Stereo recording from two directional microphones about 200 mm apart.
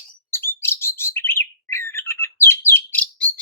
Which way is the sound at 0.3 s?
10° left (ahead or behind).